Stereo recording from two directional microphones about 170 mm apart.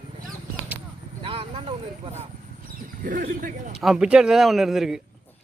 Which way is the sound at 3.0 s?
55° right (ahead or behind).